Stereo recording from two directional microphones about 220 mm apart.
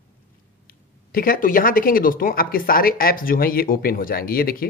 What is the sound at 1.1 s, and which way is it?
Speech, 40° left (ahead or behind).